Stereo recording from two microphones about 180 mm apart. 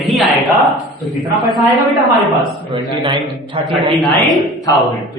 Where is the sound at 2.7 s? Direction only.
25° right (ahead or behind).